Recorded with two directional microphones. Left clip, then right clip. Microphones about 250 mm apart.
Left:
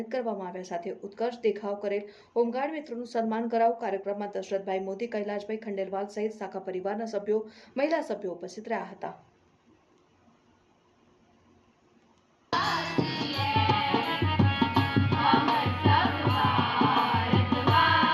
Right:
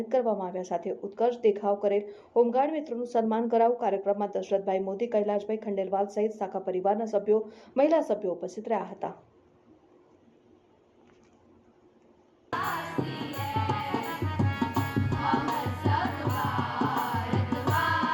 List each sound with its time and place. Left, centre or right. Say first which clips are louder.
0.1 s speech: right 6 dB; centre
12.5 s music: left 3 dB; left